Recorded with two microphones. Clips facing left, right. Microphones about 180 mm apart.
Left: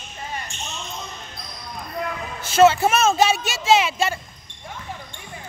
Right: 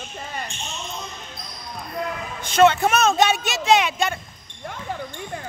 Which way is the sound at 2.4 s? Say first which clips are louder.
Left 1 dB; 5° left (ahead or behind).